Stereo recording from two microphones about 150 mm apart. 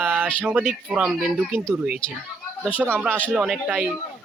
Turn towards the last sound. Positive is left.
turn(degrees=-5)  # may be behind; listen again after turning